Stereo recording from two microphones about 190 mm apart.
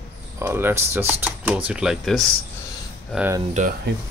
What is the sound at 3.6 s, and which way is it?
Speech, 40° right (ahead or behind).